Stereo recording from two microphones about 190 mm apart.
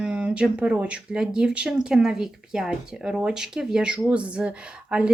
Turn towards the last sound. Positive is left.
turn(degrees=-5)  # may be behind; listen again after turning